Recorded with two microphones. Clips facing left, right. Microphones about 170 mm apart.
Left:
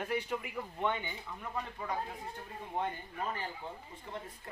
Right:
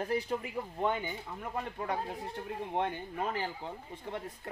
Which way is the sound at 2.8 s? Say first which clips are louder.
Right 2 dB; 80° right.